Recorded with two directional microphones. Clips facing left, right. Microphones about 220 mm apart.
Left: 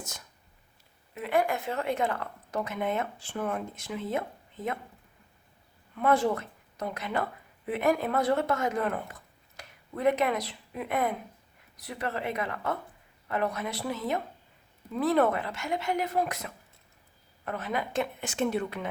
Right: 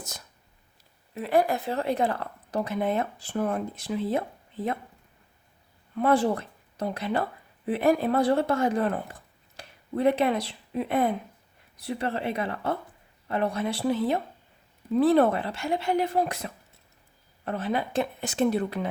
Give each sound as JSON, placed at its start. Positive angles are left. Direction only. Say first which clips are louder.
{"t": 1.1, "sound": "a woman's voice", "louder": "right 4 dB", "side_deg": -35}
{"t": 6.0, "sound": "a woman's voice", "louder": "right 2 dB", "side_deg": -30}